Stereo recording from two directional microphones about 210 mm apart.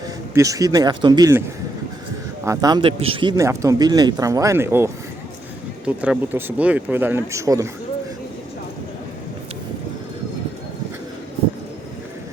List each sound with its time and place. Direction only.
0.3 s speech: 15° right (ahead or behind)